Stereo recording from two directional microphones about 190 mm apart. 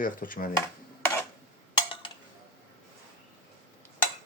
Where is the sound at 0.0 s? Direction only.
45° left (ahead or behind).